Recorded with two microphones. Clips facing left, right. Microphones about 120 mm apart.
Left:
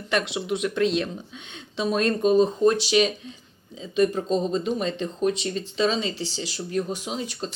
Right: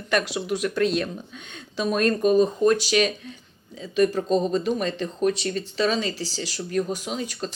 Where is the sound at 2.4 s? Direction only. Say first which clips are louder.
Even; 30° left (ahead or behind).